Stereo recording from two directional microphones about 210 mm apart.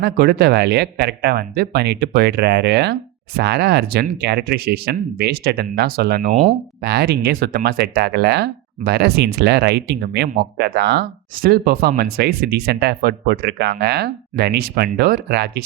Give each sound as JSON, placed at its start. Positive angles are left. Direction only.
{"t": 0.0, "sound": "speech", "side_deg": -50}